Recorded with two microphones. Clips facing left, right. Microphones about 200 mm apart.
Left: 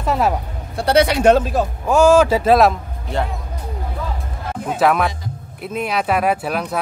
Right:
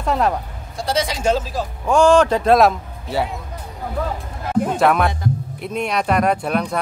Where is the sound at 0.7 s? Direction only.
65° left (ahead or behind).